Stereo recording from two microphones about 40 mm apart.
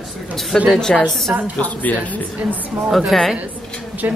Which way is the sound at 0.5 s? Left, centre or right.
Centre.